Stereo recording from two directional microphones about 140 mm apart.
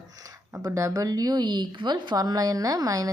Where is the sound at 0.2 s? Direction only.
25° right (ahead or behind).